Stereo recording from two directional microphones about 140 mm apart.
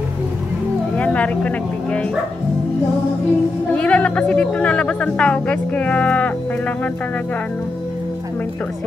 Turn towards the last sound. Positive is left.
turn(degrees=10)  # may be behind; listen again after turning